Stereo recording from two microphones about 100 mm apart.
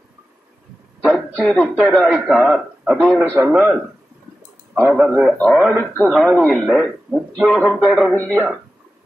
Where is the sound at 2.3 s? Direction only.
15° right (ahead or behind).